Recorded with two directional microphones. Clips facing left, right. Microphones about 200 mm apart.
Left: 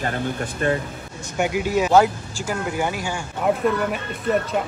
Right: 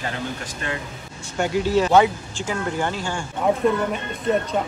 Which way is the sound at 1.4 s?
10° left (ahead or behind).